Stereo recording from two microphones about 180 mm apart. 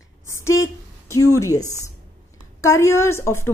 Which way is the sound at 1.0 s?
15° left (ahead or behind).